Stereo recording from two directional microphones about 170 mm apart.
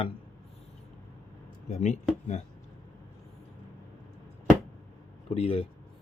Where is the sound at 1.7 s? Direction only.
40° left (ahead or behind).